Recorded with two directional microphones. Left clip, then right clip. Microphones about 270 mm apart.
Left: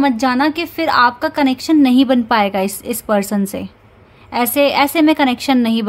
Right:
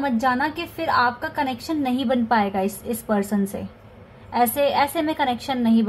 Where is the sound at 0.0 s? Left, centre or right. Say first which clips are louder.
Left 7 dB; left.